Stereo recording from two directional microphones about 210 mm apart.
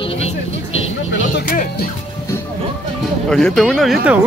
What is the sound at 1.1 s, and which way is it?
Music, 60° left (ahead or behind).